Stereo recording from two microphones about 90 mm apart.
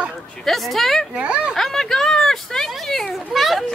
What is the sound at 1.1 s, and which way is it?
Speech, 15° right (ahead or behind).